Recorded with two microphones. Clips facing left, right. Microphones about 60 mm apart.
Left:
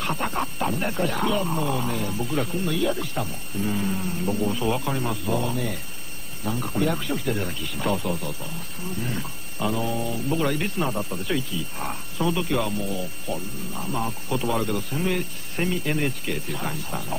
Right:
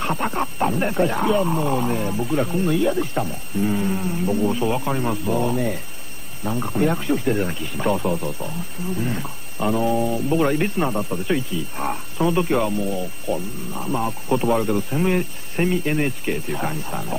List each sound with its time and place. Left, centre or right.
0.0 s speech: centre
3.6 s speech: centre